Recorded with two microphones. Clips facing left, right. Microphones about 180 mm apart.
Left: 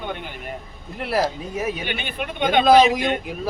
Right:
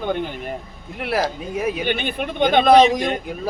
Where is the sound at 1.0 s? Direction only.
Centre (ahead or behind).